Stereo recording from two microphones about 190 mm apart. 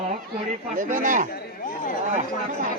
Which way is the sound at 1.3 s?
45° left (ahead or behind).